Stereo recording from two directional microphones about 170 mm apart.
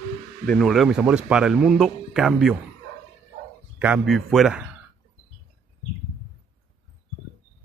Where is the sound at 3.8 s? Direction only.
5° right (ahead or behind).